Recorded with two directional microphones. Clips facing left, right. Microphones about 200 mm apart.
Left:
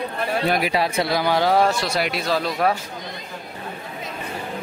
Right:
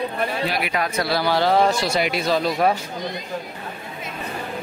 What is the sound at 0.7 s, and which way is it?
Speech, 30° left (ahead or behind).